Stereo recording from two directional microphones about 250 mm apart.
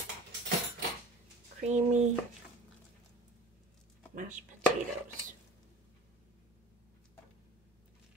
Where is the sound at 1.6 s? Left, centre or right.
Right.